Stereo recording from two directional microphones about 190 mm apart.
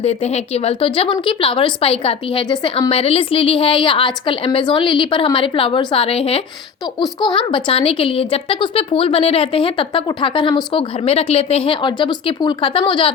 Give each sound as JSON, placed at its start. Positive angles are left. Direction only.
{"t": 0.0, "sound": "speech", "side_deg": 35}